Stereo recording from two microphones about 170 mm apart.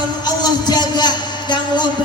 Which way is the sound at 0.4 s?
25° left (ahead or behind).